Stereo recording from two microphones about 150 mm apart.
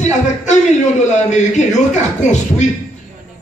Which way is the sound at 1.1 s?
50° left (ahead or behind).